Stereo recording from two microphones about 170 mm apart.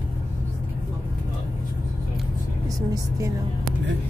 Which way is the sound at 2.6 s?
20° right (ahead or behind).